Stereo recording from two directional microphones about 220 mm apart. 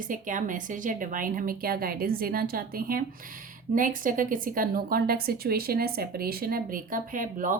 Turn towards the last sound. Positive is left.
turn(degrees=-35)  # may be behind; listen again after turning